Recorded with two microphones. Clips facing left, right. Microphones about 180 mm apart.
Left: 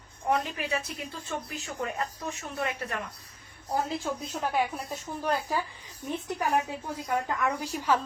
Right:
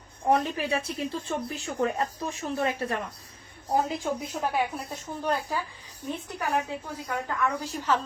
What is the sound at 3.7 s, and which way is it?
Speech, 15° right (ahead or behind).